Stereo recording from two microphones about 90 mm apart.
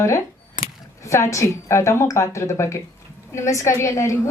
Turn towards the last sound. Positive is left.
turn(degrees=35)  # may be behind; listen again after turning